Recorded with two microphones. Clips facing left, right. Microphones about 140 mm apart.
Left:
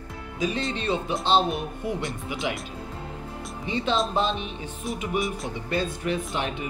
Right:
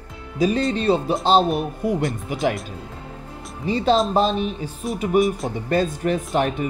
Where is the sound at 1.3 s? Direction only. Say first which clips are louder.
Right 5 dB; 40° right (ahead or behind).